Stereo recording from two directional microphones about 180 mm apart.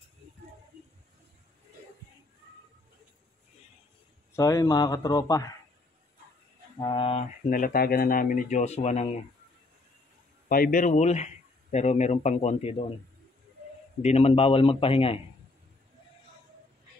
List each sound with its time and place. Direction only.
4.4 s speech: 20° left (ahead or behind)
6.8 s speech: 30° left (ahead or behind)
7.4 s speech: 50° left (ahead or behind)
10.5 s speech: 50° left (ahead or behind); by 12.8 s 35° left (ahead or behind)
14.0 s speech: 35° left (ahead or behind)